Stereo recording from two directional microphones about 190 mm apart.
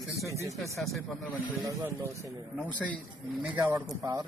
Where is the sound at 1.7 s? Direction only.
15° right (ahead or behind).